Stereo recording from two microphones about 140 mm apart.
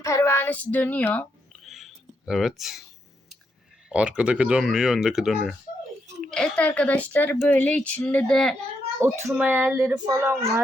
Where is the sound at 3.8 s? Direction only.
5° right (ahead or behind).